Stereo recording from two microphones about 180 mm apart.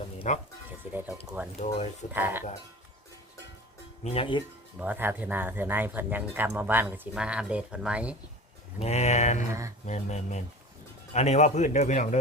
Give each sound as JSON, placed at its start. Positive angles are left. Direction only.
{"t": 0.3, "sound": "a man's voice", "side_deg": 40}
{"t": 0.9, "sound": "speech", "side_deg": -10}
{"t": 1.5, "sound": "a man's voice", "side_deg": 40}
{"t": 2.1, "sound": "speech", "side_deg": -10}
{"t": 4.0, "sound": "a man's voice", "side_deg": 30}
{"t": 4.8, "sound": "speech", "side_deg": -10}
{"t": 8.8, "sound": "a man's voice", "side_deg": 40}
{"t": 9.5, "sound": "speech", "side_deg": -15}
{"t": 9.8, "sound": "a man's voice", "side_deg": 40}